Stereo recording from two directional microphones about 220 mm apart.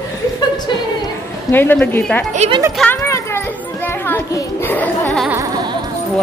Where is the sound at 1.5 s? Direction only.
10° left (ahead or behind).